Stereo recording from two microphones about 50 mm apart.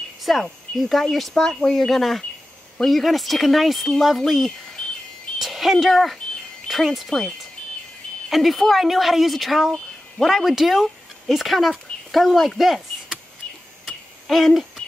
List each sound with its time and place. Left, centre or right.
0.2 s speech: centre
5.4 s speech: centre
7.1 s speech: centre
8.3 s speech: centre
13.8 s a sound: centre
14.8 s a sound: left